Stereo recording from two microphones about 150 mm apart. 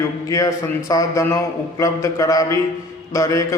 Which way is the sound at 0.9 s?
20° left (ahead or behind).